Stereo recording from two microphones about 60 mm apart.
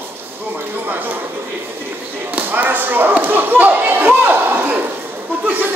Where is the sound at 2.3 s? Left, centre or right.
Right.